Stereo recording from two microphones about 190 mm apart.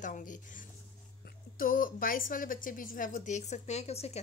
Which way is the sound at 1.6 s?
45° left (ahead or behind).